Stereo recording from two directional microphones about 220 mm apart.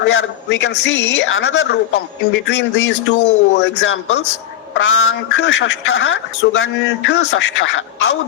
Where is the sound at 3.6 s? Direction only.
55° left (ahead or behind).